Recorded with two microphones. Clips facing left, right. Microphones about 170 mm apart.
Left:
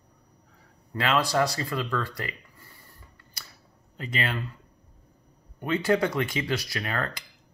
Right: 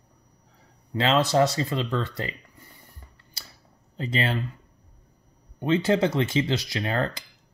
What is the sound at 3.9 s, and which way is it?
Speech, 30° right (ahead or behind).